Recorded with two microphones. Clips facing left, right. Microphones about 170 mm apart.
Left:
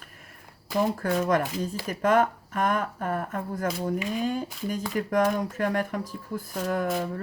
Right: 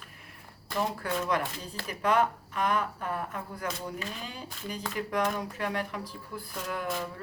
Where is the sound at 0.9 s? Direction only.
45° left (ahead or behind).